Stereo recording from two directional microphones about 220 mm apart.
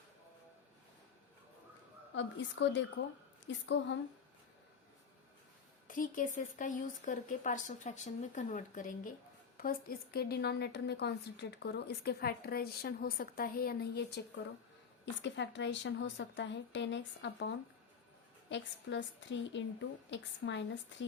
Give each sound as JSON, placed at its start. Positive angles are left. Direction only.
{"t": 2.1, "sound": "a woman's voice", "side_deg": 55}
{"t": 5.9, "sound": "a woman's voice", "side_deg": 35}
{"t": 15.2, "sound": "a woman's voice", "side_deg": 55}